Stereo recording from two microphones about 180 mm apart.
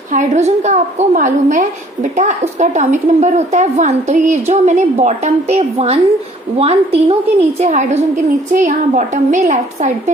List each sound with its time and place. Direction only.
0.1 s a woman's voice: 40° right (ahead or behind)